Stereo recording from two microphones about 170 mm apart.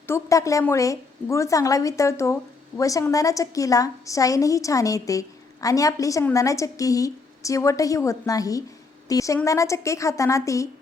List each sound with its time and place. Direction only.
0.1 s a woman's voice: 20° left (ahead or behind)